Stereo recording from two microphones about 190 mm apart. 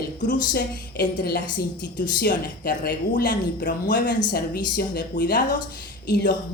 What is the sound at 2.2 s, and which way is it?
A woman's voice, 50° left (ahead or behind).